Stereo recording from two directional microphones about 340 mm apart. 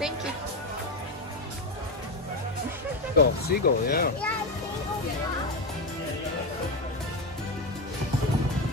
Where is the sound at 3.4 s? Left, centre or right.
Left.